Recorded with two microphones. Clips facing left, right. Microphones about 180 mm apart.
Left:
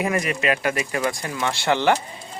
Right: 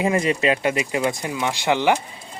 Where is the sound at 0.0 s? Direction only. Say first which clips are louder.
Right 3 dB; 25° right (ahead or behind).